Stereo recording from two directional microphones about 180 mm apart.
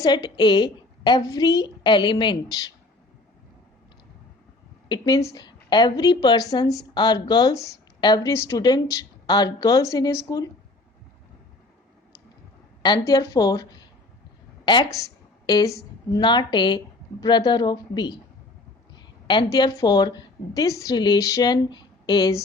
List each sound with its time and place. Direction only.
0.0 s speech: 25° left (ahead or behind)
4.9 s speech: 20° left (ahead or behind)
12.8 s speech: 20° left (ahead or behind)
14.6 s a sound: 25° left (ahead or behind)
14.9 s a woman's voice: 20° left (ahead or behind)